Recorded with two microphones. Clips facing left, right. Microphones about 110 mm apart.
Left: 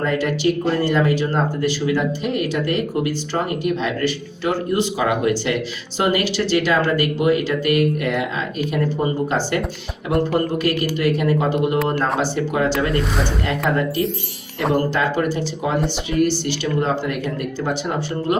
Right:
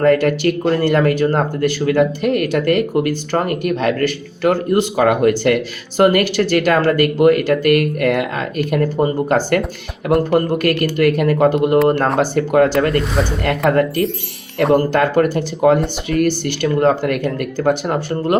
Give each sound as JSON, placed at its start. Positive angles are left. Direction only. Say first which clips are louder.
{"t": 0.0, "sound": "speech", "louder": "right 6 dB", "side_deg": -55}
{"t": 10.3, "sound": "speech", "louder": "right 4 dB", "side_deg": -55}
{"t": 12.8, "sound": "speech", "louder": "right 4 dB", "side_deg": 0}
{"t": 13.7, "sound": "speech", "louder": "right 5 dB", "side_deg": -55}